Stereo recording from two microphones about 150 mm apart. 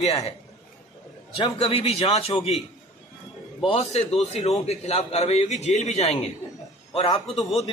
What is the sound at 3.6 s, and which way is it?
A man's voice, 40° left (ahead or behind).